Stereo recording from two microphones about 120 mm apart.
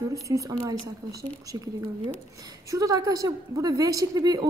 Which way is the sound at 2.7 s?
25° right (ahead or behind).